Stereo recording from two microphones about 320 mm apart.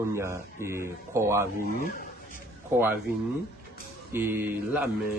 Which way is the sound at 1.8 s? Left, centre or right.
Left.